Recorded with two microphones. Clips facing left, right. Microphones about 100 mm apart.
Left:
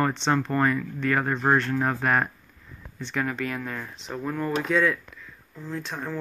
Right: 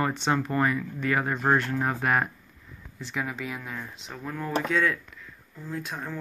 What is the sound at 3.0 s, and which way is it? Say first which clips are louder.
Speech: left 4 dB; 5° right (ahead or behind).